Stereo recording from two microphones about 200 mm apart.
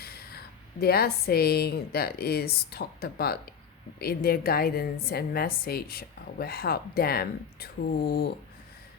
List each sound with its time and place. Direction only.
0.0 s a woman's voice: 50° left (ahead or behind)